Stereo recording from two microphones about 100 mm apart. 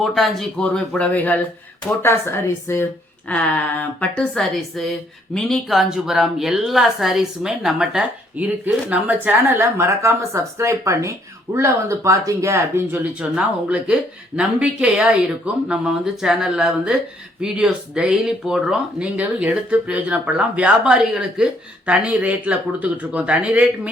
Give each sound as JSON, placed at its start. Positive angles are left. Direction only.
{"t": 0.0, "sound": "a woman's voice", "side_deg": 0}
{"t": 0.6, "sound": "speech", "side_deg": 10}
{"t": 3.2, "sound": "speech", "side_deg": 15}
{"t": 4.8, "sound": "a woman's voice", "side_deg": 5}
{"t": 8.4, "sound": "a woman's voice", "side_deg": -15}
{"t": 13.3, "sound": "speech", "side_deg": -10}